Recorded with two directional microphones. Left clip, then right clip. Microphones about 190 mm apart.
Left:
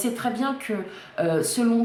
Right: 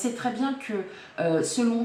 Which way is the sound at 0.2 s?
45° left (ahead or behind).